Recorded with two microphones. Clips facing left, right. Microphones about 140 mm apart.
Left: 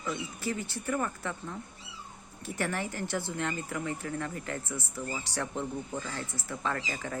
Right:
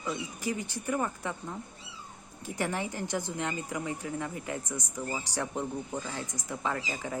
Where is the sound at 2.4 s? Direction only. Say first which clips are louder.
Right 1 dB; 15° right (ahead or behind).